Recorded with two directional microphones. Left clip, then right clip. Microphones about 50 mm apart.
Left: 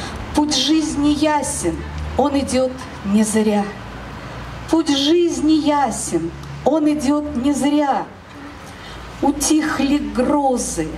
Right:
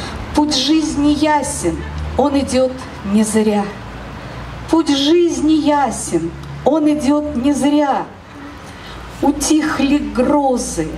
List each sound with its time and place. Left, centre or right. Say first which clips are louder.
0.0 s a sound: right 3 dB; centre
1.0 s a woman's voice: right 3 dB; centre
9.2 s a woman's voice: right 2 dB; centre